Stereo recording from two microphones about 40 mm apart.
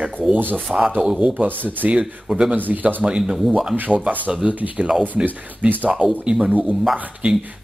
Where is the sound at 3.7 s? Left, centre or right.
Right.